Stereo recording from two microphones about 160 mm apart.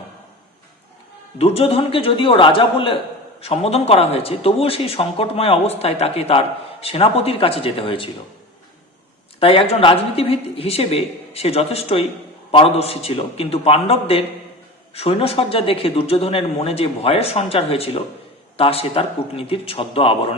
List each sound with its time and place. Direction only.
1.4 s speech: 40° left (ahead or behind)
9.4 s speech: 35° left (ahead or behind)